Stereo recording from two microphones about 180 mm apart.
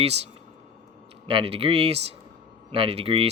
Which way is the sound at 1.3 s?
30° right (ahead or behind).